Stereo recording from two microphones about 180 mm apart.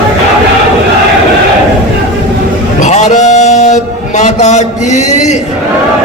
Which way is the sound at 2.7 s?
40° left (ahead or behind).